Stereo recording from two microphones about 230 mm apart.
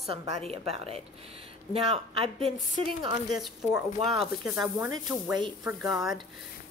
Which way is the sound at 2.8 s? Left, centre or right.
Centre.